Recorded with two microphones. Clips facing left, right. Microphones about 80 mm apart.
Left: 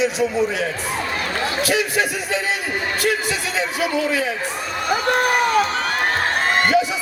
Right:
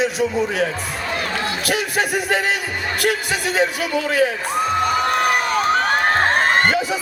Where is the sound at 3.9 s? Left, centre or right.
Right.